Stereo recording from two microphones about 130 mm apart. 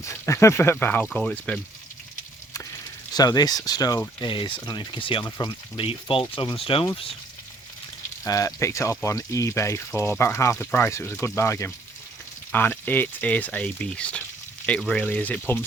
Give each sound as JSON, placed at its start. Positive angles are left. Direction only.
{"t": 0.0, "sound": "speech", "side_deg": 20}
{"t": 3.2, "sound": "speech", "side_deg": 30}
{"t": 4.2, "sound": "speech", "side_deg": 40}
{"t": 8.2, "sound": "speech", "side_deg": 25}